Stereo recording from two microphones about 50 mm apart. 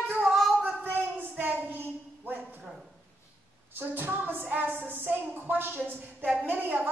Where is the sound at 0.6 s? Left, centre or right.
Right.